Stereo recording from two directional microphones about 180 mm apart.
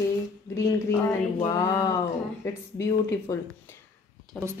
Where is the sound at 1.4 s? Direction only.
20° left (ahead or behind).